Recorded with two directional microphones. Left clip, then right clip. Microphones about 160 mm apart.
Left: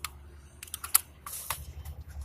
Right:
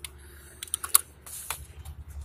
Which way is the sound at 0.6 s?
65° right (ahead or behind).